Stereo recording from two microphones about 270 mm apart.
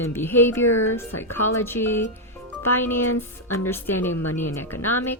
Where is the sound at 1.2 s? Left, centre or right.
Centre.